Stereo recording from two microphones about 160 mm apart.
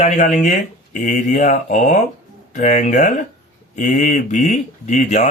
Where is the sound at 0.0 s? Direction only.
45° left (ahead or behind).